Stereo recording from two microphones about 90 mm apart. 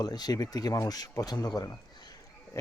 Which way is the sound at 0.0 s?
45° left (ahead or behind).